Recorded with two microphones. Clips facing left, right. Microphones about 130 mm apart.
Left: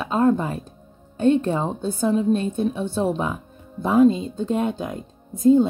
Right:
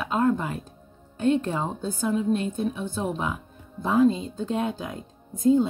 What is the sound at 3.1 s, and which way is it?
Speech, 25° left (ahead or behind).